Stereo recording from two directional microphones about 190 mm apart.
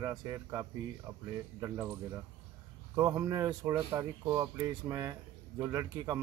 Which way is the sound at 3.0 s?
15° right (ahead or behind).